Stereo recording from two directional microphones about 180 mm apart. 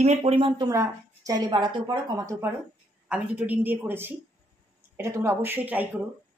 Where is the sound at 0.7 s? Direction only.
15° right (ahead or behind).